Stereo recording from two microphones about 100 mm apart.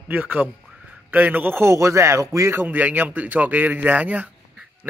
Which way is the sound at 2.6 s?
15° right (ahead or behind).